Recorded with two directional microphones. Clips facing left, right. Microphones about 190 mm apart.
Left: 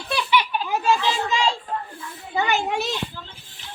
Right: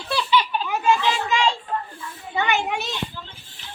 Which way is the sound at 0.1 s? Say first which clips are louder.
Right 1 dB; 15° left (ahead or behind).